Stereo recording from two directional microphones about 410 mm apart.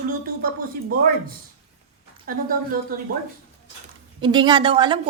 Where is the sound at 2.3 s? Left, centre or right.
Right.